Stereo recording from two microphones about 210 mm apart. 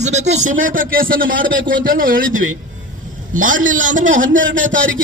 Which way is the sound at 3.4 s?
70° right (ahead or behind).